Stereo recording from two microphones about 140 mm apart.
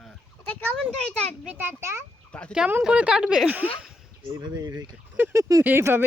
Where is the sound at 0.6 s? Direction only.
5° left (ahead or behind).